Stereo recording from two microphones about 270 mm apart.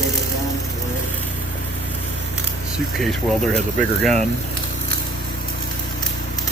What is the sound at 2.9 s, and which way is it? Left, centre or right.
Speech, centre.